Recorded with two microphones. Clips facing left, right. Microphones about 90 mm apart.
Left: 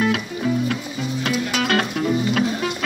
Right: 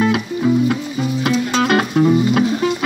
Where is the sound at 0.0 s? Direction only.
15° right (ahead or behind).